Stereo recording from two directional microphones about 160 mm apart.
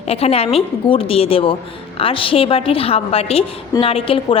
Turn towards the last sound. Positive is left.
turn(degrees=35)  # may be behind; listen again after turning